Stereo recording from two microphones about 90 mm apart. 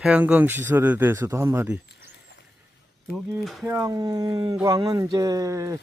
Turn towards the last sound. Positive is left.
turn(degrees=-40)  # may be behind; listen again after turning